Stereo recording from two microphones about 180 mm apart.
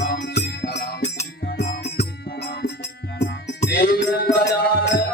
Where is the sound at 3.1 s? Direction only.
65° left (ahead or behind).